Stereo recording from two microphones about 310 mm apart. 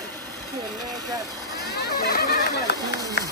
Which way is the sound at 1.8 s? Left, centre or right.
Left.